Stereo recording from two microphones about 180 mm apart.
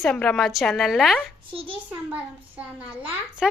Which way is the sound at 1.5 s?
30° right (ahead or behind).